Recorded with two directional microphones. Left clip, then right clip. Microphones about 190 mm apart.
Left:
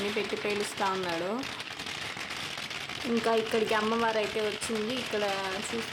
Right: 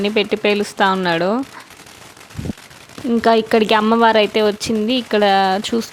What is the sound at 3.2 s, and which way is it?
Speech, 50° right (ahead or behind).